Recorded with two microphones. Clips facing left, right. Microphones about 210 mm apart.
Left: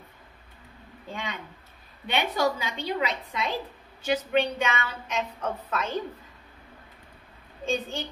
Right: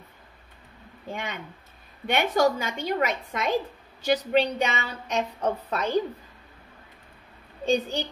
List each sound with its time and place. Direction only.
2.0 s a woman's voice: 45° right (ahead or behind)
7.6 s a woman's voice: 35° right (ahead or behind)